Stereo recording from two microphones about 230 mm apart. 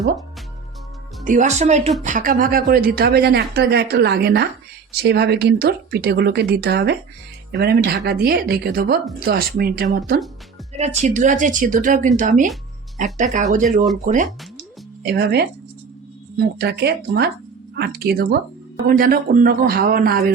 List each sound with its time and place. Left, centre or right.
1.2 s a woman's voice: right
10.8 s a woman's voice: right
15.0 s a woman's voice: right